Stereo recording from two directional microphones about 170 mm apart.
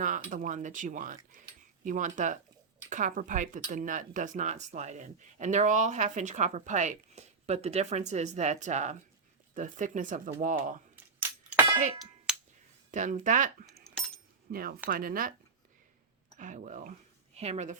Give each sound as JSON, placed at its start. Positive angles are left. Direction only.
{"t": 0.0, "sound": "speech", "side_deg": -50}
{"t": 11.2, "sound": "chink", "side_deg": -10}
{"t": 12.3, "sound": "a sound", "side_deg": -5}
{"t": 12.9, "sound": "speech", "side_deg": -45}
{"t": 16.4, "sound": "a woman's voice", "side_deg": -45}